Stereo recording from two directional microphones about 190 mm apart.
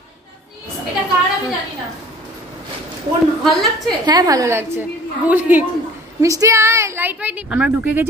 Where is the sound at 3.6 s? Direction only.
Centre (ahead or behind).